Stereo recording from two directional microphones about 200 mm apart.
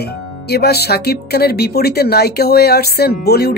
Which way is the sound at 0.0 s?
55° left (ahead or behind).